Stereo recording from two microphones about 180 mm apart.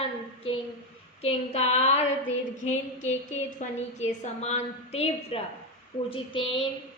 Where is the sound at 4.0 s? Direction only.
40° left (ahead or behind).